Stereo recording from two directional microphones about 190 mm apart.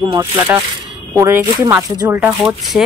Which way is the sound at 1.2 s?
15° right (ahead or behind).